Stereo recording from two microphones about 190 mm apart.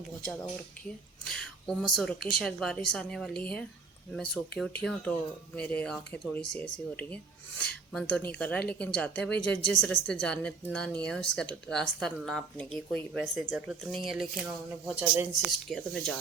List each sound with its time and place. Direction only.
1.2 s speech: 5° left (ahead or behind)